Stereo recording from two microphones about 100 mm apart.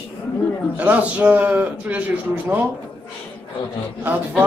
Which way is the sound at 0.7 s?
15° right (ahead or behind).